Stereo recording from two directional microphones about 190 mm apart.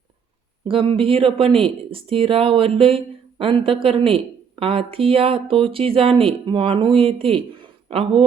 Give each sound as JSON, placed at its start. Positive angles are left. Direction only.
{"t": 0.9, "sound": "speech", "side_deg": -30}